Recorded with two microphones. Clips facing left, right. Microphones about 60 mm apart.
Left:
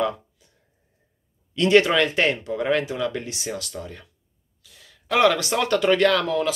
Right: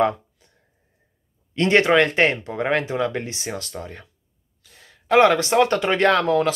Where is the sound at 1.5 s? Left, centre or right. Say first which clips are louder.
Right 1 dB; right.